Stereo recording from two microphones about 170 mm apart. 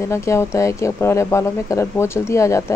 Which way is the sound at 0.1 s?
15° left (ahead or behind).